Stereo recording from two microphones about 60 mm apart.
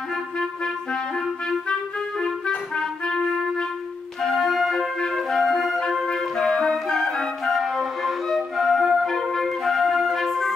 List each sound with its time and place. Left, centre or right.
1.7 s clarinet: centre
2.5 s music: centre
4.2 s flute: centre